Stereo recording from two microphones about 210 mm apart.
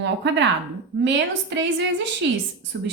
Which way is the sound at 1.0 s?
55° right (ahead or behind).